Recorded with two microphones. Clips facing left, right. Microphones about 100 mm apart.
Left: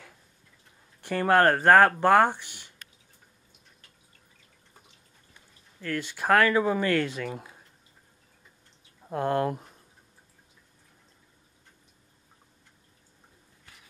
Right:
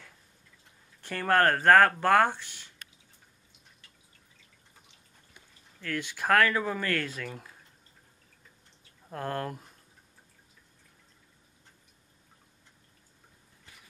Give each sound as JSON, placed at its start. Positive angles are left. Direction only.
{"t": 1.0, "sound": "speech", "side_deg": 10}
{"t": 5.8, "sound": "speech", "side_deg": 5}
{"t": 7.2, "sound": "speech", "side_deg": 20}
{"t": 9.1, "sound": "speech", "side_deg": 15}